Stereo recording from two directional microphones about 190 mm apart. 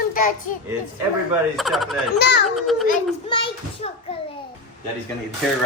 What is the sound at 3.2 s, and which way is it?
Speech, 25° left (ahead or behind).